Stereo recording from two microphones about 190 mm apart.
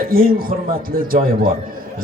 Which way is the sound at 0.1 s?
50° right (ahead or behind).